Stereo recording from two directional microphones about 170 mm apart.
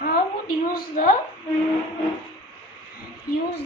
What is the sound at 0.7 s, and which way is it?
Speech, 55° left (ahead or behind).